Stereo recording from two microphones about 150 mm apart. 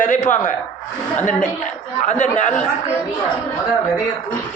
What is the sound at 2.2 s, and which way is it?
Speech, 50° left (ahead or behind).